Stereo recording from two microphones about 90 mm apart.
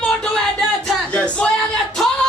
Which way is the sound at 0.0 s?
10° left (ahead or behind).